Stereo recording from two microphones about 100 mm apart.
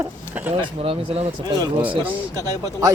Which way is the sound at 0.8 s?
75° right (ahead or behind).